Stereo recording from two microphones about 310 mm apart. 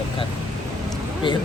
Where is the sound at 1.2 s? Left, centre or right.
Centre.